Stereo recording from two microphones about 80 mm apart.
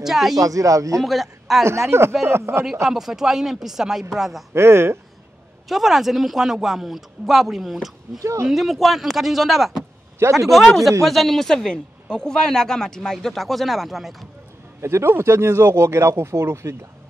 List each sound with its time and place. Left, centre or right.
0.0 s a man's voice: centre
0.4 s speech: right
0.9 s a man's voice: centre
1.6 s speech: right
2.6 s a man's voice: centre
4.6 s speech: right
5.7 s a man's voice: centre
8.2 s speech: right
8.5 s a man's voice: centre
14.8 s speech: right